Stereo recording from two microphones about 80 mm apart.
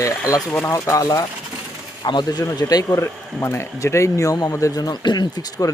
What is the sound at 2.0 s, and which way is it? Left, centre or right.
Speech, left.